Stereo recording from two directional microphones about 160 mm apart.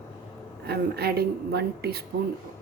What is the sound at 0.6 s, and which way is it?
A woman's voice, 85° right.